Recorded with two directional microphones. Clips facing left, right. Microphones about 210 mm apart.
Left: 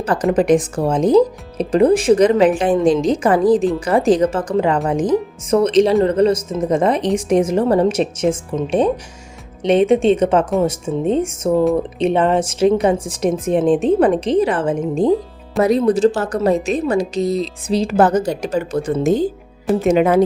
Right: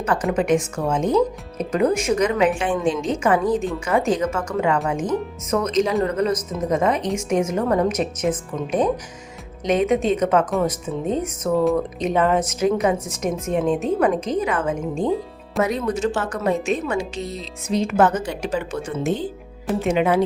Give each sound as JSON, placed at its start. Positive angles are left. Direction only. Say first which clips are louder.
{"t": 0.0, "sound": "a woman's voice", "louder": "left 5 dB", "side_deg": 35}
{"t": 9.6, "sound": "a woman's voice", "louder": "left 6 dB", "side_deg": 30}